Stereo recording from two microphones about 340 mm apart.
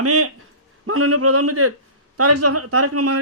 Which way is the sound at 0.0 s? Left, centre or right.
Right.